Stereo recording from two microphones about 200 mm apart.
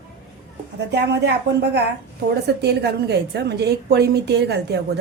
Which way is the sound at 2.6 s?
55° right (ahead or behind).